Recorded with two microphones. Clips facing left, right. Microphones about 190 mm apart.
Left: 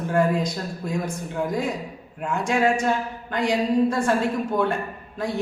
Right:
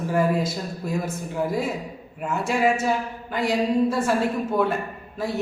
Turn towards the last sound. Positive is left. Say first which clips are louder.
# even
turn(degrees=-5)  # may be behind; listen again after turning